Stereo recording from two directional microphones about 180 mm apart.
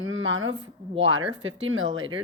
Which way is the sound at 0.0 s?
90° right.